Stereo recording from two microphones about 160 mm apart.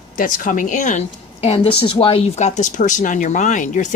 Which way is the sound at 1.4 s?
40° left (ahead or behind).